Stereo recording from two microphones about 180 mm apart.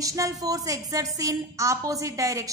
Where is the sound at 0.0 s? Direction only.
20° right (ahead or behind).